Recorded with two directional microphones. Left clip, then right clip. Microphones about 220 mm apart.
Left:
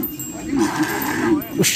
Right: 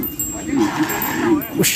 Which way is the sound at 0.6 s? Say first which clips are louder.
Right 1 dB; 50° left (ahead or behind).